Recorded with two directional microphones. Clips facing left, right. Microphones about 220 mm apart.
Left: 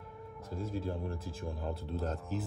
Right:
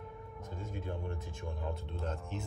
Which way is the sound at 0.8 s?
30° left (ahead or behind).